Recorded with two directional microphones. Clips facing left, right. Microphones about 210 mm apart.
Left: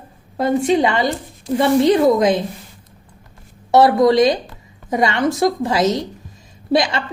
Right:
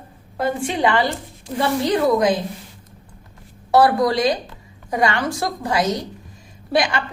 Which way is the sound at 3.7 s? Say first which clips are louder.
Left 4 dB; 25° left (ahead or behind).